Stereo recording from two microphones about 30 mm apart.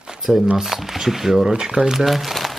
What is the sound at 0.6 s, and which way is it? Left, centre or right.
Speech, centre.